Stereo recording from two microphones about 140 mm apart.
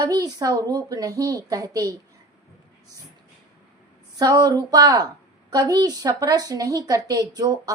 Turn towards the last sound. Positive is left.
turn(degrees=-25)  # may be behind; listen again after turning